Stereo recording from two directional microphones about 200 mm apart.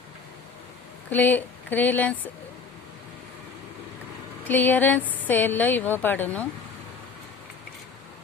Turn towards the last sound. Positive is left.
turn(degrees=10)  # may be behind; listen again after turning